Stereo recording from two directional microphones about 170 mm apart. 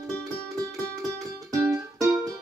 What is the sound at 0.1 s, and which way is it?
Music, centre (ahead or behind).